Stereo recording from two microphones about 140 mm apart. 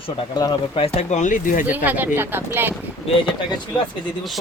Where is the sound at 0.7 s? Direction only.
45° left (ahead or behind); by 1.7 s 75° left (ahead or behind).